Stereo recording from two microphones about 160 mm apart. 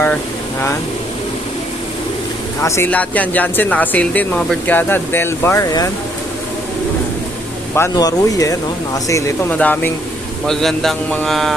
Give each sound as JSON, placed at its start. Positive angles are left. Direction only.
{"t": 2.6, "sound": "speech", "side_deg": 15}
{"t": 7.8, "sound": "a man's voice", "side_deg": 20}